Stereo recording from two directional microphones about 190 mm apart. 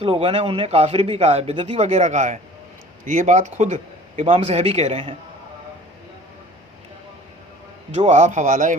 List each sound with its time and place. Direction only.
0.0 s speech: 30° right (ahead or behind)
7.9 s speech: 35° right (ahead or behind)